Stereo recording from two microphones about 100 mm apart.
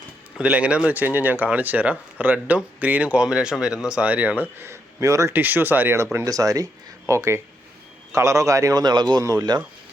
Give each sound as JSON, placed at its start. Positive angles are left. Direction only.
{"t": 0.3, "sound": "speech", "side_deg": -10}
{"t": 5.3, "sound": "speech", "side_deg": -20}
{"t": 6.1, "sound": "a man's voice", "side_deg": -35}